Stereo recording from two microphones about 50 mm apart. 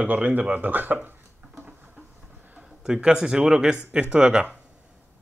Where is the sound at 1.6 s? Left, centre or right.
Right.